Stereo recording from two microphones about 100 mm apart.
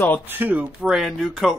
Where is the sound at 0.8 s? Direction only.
5° right (ahead or behind).